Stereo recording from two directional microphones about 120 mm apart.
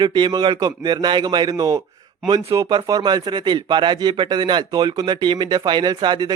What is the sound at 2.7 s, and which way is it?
Speech, 40° right (ahead or behind).